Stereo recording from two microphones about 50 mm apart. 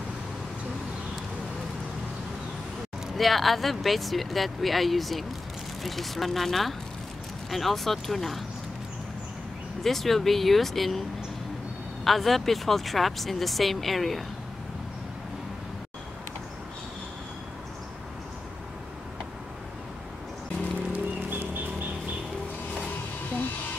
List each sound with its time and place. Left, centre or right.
3.2 s speech: centre
9.8 s speech: centre
20.9 s a sound: right